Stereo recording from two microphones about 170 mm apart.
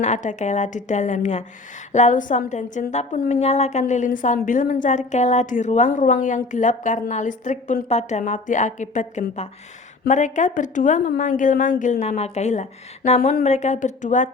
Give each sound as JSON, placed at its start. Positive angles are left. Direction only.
{"t": 0.0, "sound": "a woman's voice", "side_deg": 45}